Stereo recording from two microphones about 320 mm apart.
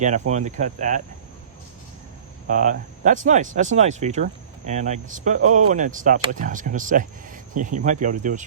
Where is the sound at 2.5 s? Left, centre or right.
Right.